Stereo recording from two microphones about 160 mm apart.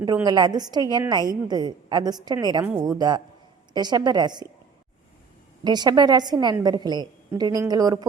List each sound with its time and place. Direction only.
0.3 s a woman's voice: 25° right (ahead or behind)
5.6 s a woman's voice: 25° right (ahead or behind)